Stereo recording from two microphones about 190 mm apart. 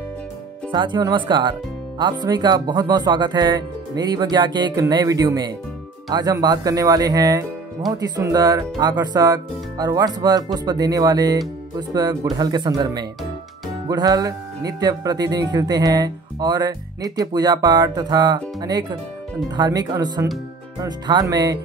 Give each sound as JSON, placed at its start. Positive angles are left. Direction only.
{"t": 0.7, "sound": "speech", "side_deg": -25}